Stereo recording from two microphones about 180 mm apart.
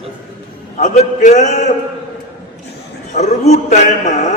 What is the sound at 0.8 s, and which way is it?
Speech, 40° left (ahead or behind).